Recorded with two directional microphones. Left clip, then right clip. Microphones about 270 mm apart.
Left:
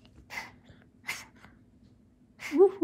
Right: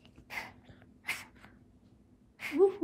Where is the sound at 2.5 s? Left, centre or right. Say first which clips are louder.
Left 4 dB; left.